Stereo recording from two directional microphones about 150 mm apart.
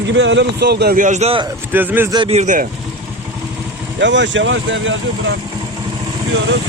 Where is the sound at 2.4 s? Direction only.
55° right (ahead or behind).